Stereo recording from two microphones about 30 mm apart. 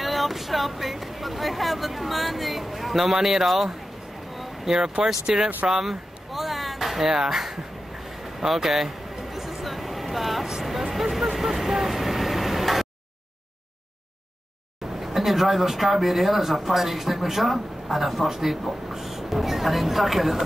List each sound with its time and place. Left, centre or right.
0.0 s speech: centre
5.7 s music: centre
7.2 s speech: centre
8.5 s a sound: centre
10.8 s vehicle: centre
15.0 s speech: centre